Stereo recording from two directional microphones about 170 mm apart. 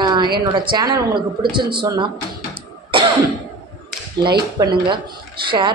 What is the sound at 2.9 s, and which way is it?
Cough, 30° right (ahead or behind).